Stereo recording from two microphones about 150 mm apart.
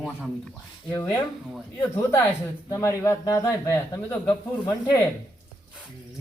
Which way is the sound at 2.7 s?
20° left (ahead or behind).